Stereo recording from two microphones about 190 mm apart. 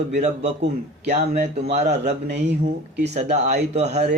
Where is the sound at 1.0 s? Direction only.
35° right (ahead or behind).